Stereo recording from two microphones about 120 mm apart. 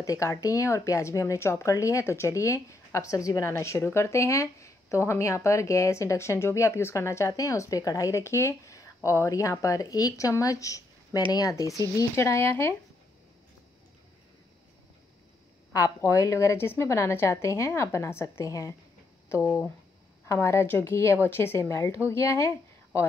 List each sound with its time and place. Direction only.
0.0 s speech: 30° left (ahead or behind)
15.7 s speech: 25° left (ahead or behind)
19.2 s a sound: 25° left (ahead or behind)
20.2 s speech: 25° left (ahead or behind)